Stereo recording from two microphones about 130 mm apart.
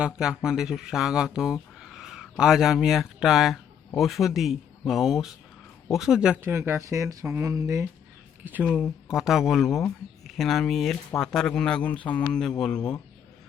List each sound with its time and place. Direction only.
0.0 s speech: 5° right (ahead or behind)
6.4 s speech: 20° right (ahead or behind)
8.7 s a man's voice: 5° right (ahead or behind)